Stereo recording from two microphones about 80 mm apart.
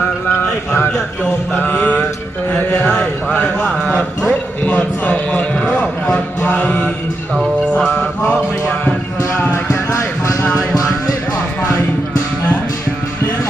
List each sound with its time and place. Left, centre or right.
0.3 s a sound: left
1.5 s mantra: left
2.5 s chant: centre
3.3 s mantra: left
3.7 s speech: centre
4.7 s a man's voice: centre
6.5 s chant: centre
7.8 s music: centre
9.6 s a sound: left